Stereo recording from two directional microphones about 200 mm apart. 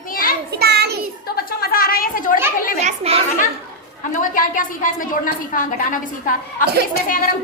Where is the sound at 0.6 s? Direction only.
55° right (ahead or behind).